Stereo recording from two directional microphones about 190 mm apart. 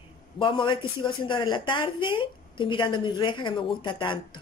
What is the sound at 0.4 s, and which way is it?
Speech, 25° left (ahead or behind).